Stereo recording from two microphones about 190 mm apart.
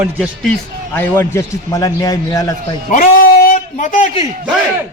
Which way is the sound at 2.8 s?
45° left (ahead or behind).